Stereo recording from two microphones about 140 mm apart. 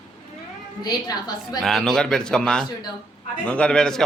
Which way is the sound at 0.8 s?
30° left (ahead or behind).